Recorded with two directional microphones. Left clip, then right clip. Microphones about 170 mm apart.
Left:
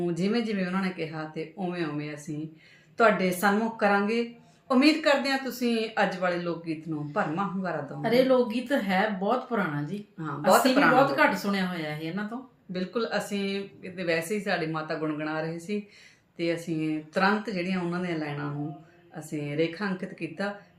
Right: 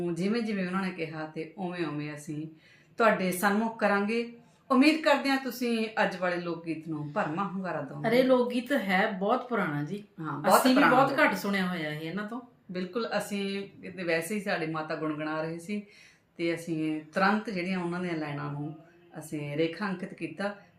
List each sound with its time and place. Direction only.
0.0 s speech: 15° left (ahead or behind)
8.0 s speech: 20° right (ahead or behind)
10.2 s speech: 15° left (ahead or behind)
11.1 s speech: 20° right (ahead or behind)
12.7 s speech: 15° left (ahead or behind)